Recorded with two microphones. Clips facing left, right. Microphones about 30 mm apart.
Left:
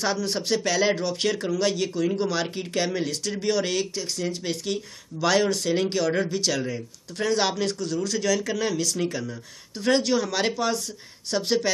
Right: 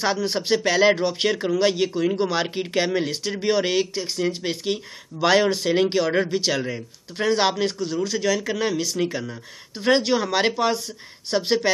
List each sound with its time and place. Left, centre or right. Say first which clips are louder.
0.0 s speech: right 3 dB; right